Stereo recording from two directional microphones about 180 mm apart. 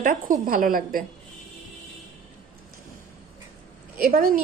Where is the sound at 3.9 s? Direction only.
55° right (ahead or behind).